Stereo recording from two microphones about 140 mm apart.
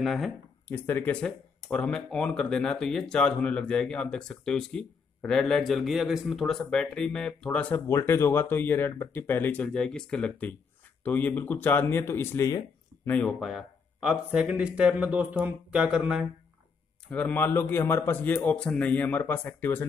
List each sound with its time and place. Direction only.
0.0 s speech: centre (ahead or behind)
0.7 s a man's voice: 15° left (ahead or behind)
13.0 s a man's voice: 10° left (ahead or behind)
13.5 s a sound: 5° right (ahead or behind)
14.3 s speech: 5° right (ahead or behind)
17.1 s a man's voice: 10° left (ahead or behind)